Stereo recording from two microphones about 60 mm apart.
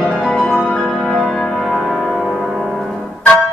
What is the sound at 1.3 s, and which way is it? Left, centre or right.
Music, centre.